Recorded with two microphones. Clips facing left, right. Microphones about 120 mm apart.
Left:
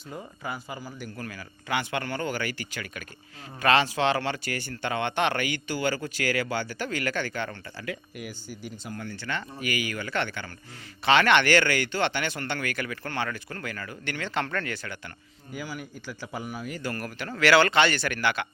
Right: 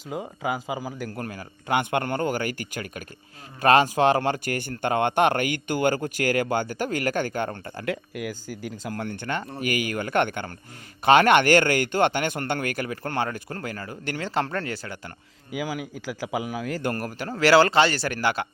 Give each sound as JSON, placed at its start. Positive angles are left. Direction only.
{"t": 0.1, "sound": "speech", "side_deg": -90}
{"t": 1.2, "sound": "speech", "side_deg": -45}
{"t": 7.9, "sound": "speech", "side_deg": -90}
{"t": 8.9, "sound": "speech", "side_deg": -65}
{"t": 15.5, "sound": "speech", "side_deg": -90}
{"t": 16.9, "sound": "speech", "side_deg": -40}